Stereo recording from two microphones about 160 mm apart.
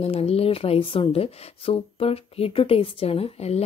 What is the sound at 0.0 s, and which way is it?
A woman's voice, 40° left (ahead or behind).